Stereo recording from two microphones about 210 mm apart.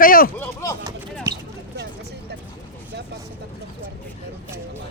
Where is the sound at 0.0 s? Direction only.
45° left (ahead or behind).